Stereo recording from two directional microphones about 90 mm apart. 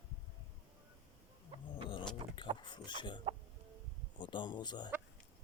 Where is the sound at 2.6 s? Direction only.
60° left (ahead or behind).